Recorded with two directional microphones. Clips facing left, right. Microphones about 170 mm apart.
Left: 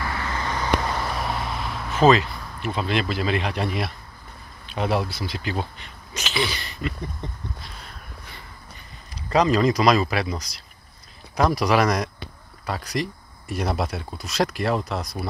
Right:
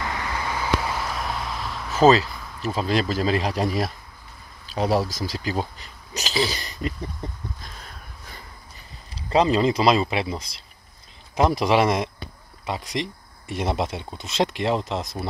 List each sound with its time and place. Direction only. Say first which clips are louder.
0.0 s vehicle: even; 15° right (ahead or behind); by 2.0 s centre (ahead or behind)
2.7 s speech: right 2 dB; 35° right (ahead or behind)
9.1 s speech: even; 30° right (ahead or behind)